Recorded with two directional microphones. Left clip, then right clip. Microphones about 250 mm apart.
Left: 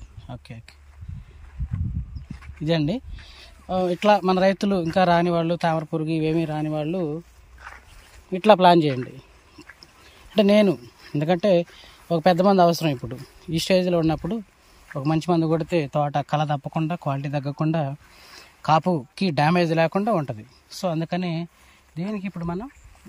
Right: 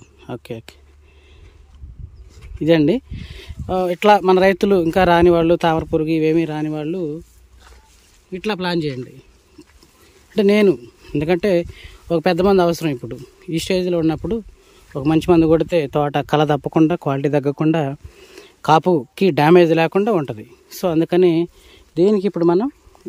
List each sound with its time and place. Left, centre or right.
0.3 s speech: centre
2.6 s speech: centre
8.3 s speech: centre
10.3 s speech: centre; by 22.7 s right